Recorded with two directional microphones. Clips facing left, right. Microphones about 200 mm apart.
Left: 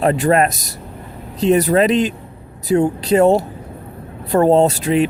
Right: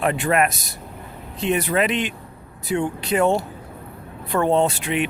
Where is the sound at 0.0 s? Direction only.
35° left (ahead or behind).